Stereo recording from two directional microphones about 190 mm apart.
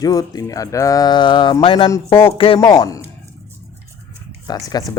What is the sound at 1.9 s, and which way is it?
Speech, 15° left (ahead or behind).